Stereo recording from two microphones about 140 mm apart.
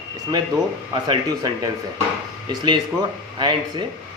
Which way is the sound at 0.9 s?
30° right (ahead or behind).